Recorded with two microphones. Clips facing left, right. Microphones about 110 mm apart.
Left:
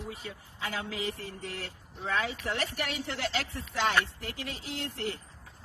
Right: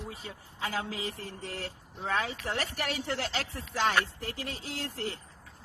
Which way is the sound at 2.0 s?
40° right (ahead or behind).